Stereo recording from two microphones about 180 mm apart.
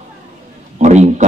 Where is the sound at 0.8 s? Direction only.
40° right (ahead or behind).